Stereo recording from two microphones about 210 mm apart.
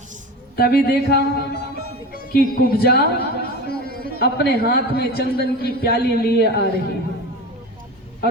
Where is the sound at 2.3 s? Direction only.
45° left (ahead or behind).